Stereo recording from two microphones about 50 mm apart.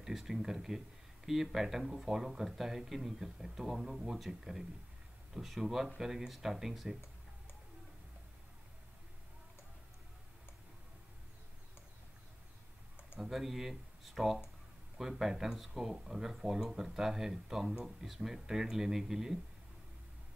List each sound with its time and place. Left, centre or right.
0.0 s speech: centre
13.2 s speech: centre